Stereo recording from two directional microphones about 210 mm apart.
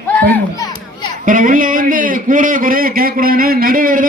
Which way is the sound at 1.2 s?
40° right (ahead or behind).